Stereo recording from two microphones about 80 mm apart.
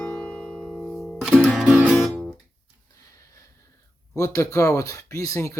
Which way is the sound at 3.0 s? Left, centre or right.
Left.